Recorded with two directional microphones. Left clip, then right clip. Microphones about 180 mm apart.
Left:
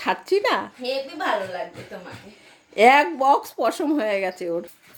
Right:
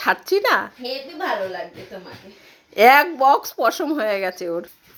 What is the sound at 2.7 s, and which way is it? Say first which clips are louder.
Speech: right 2 dB; 10° left (ahead or behind).